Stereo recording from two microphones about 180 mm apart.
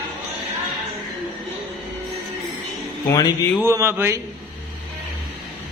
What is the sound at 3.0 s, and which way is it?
Speech, 20° left (ahead or behind).